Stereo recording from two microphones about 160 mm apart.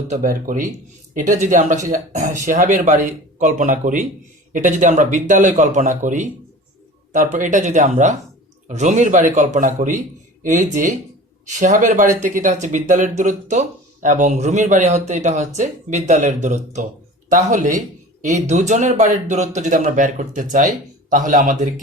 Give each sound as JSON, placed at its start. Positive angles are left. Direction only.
{"t": 0.1, "sound": "speech", "side_deg": -55}